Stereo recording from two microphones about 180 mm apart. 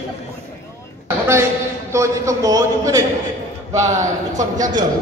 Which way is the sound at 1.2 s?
15° right (ahead or behind).